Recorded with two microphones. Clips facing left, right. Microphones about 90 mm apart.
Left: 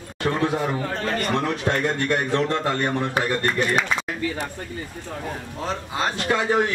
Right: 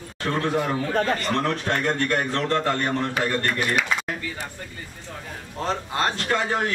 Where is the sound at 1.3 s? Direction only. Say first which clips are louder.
Left 1 dB; 5° left (ahead or behind).